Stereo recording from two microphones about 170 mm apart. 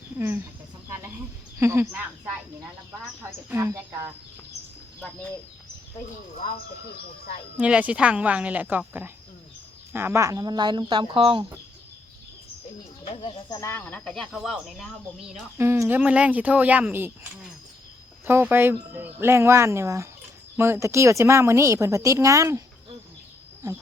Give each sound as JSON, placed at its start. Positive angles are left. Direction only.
{"t": 0.2, "sound": "speech", "side_deg": -15}
{"t": 1.5, "sound": "speech", "side_deg": -15}
{"t": 7.6, "sound": "speech", "side_deg": -10}
{"t": 13.1, "sound": "speech", "side_deg": 25}
{"t": 15.5, "sound": "speech", "side_deg": -15}
{"t": 18.3, "sound": "speech", "side_deg": -10}